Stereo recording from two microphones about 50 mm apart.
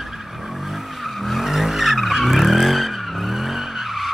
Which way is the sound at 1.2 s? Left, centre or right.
Centre.